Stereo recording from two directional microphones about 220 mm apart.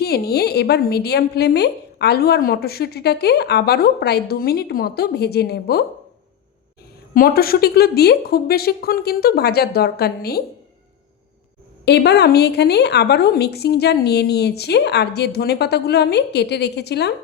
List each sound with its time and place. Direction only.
0.0 s a woman's voice: 45° left (ahead or behind)
7.1 s a woman's voice: 40° left (ahead or behind)
11.9 s a woman's voice: 50° left (ahead or behind)